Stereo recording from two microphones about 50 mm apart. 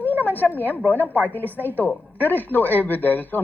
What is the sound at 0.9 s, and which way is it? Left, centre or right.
Speech, left.